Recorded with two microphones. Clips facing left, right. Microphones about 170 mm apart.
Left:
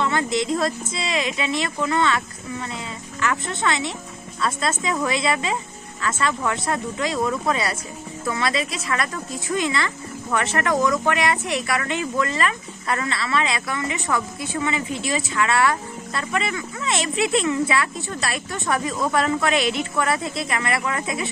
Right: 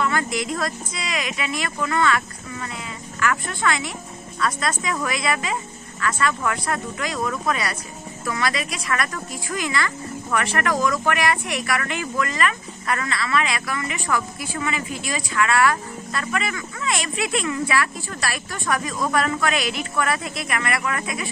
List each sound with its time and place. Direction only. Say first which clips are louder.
0.0 s a woman's voice: left 2 dB; 25° left (ahead or behind)